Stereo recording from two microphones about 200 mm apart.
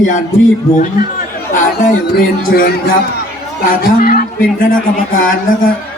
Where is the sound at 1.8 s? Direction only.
45° left (ahead or behind).